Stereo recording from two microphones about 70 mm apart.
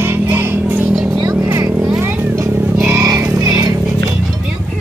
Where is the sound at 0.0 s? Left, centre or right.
Right.